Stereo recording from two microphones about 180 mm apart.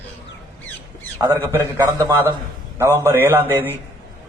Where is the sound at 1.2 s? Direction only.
10° right (ahead or behind).